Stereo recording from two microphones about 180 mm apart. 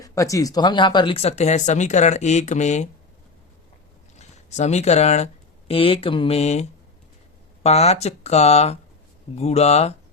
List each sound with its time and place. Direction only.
0.0 s speech: 15° left (ahead or behind); by 2.9 s 40° left (ahead or behind)
4.2 s speech: 40° left (ahead or behind)